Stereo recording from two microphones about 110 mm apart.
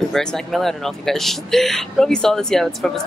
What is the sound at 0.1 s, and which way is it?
Speech, 5° left (ahead or behind).